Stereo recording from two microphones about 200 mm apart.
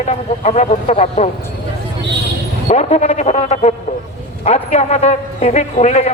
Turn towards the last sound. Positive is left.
turn(degrees=35)  # may be behind; listen again after turning